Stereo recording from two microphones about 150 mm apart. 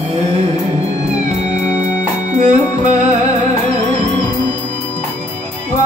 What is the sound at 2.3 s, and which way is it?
Music, 50° right (ahead or behind).